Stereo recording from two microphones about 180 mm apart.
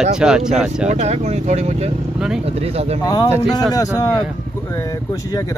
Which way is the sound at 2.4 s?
35° right (ahead or behind).